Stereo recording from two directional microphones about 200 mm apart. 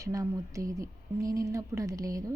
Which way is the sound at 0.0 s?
15° right (ahead or behind).